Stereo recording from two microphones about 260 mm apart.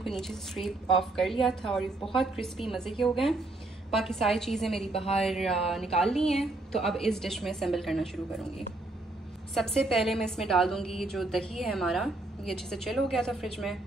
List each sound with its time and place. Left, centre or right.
0.0 s a woman's voice: centre